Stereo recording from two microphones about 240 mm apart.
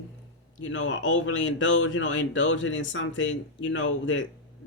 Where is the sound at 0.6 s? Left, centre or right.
Left.